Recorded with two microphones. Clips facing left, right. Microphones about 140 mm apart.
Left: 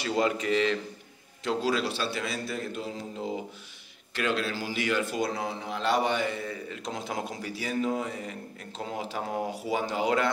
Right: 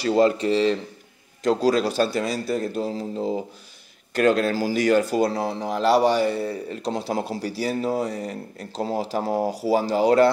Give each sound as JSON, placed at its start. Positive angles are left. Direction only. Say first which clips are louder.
{"t": 0.0, "sound": "speech", "louder": "right 8 dB", "side_deg": -35}